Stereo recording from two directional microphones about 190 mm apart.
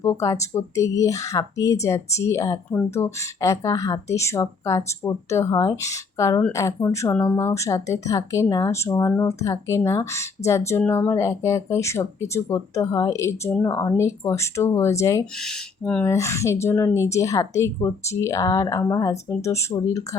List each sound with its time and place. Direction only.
0.0 s speech: 15° left (ahead or behind)
15.4 s speech: 5° left (ahead or behind)